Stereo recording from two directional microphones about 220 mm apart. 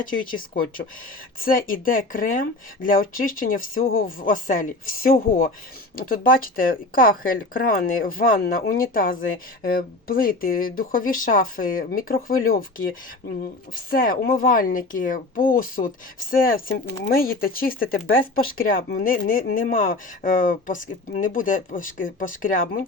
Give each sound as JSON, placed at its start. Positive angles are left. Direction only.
{"t": 0.0, "sound": "speech", "side_deg": 40}
{"t": 1.4, "sound": "speech", "side_deg": 40}
{"t": 13.9, "sound": "speech", "side_deg": 40}